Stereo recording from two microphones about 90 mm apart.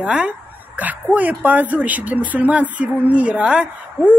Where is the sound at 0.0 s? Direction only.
10° right (ahead or behind).